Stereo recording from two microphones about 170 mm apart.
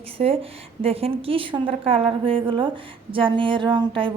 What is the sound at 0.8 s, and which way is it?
A woman's voice, 35° right (ahead or behind).